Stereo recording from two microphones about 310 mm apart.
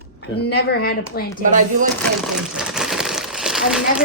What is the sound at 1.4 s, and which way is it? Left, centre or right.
Speech, right.